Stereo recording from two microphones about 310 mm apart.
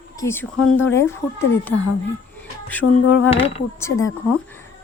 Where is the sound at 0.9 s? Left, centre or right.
Centre.